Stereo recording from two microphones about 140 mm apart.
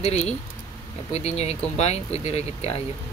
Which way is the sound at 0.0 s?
50° left (ahead or behind).